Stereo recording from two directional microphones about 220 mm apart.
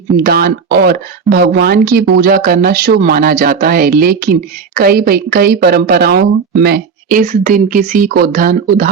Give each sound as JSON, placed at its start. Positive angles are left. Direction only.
{"t": 0.2, "sound": "a woman's voice", "side_deg": -45}